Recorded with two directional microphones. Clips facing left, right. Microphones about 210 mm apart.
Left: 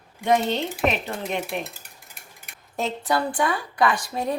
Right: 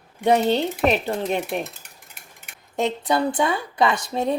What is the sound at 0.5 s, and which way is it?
Speech, 35° right (ahead or behind).